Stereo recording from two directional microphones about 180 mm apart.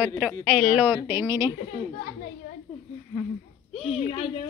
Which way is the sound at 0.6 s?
10° right (ahead or behind).